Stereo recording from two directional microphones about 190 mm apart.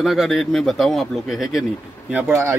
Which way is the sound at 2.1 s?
15° right (ahead or behind).